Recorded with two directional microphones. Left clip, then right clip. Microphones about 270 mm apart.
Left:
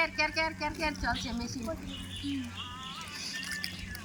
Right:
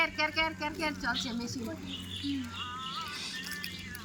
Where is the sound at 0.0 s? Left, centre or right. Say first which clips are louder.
Even; centre.